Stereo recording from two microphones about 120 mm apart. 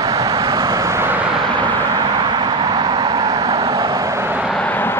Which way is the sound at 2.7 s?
35° right (ahead or behind).